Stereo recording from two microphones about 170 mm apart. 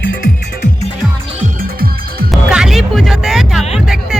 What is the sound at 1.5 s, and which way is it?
Music, 60° right (ahead or behind).